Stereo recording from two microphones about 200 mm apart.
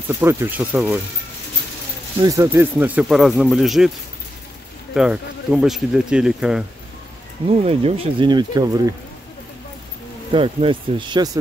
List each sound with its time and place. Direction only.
0.1 s speech: 10° right (ahead or behind)
2.2 s speech: 15° right (ahead or behind)
4.9 s speech: 5° right (ahead or behind)
7.4 s speech: 30° right (ahead or behind)
10.3 s speech: 25° right (ahead or behind)